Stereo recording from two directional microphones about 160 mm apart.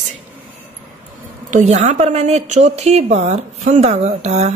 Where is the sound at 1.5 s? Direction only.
45° right (ahead or behind).